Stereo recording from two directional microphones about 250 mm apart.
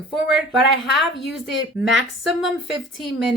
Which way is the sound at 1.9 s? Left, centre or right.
Centre.